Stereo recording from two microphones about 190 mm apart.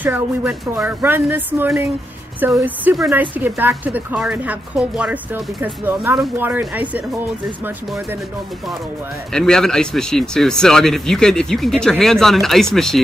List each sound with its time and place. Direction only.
0.0 s a woman's voice: 5° right (ahead or behind)
9.3 s speech: 5° left (ahead or behind)